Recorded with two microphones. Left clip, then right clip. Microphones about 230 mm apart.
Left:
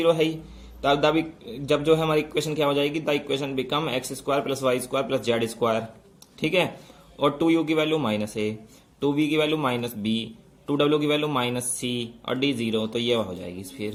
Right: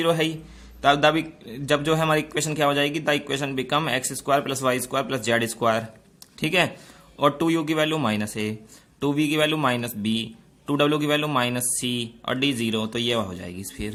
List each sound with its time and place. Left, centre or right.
0.0 s a man's voice: right